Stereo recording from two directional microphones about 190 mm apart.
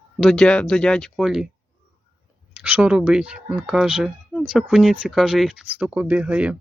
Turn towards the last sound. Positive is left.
turn(degrees=-5)  # may be behind; listen again after turning